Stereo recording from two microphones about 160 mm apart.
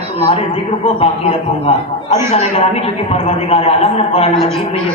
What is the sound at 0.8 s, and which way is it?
A man's voice, 40° left (ahead or behind).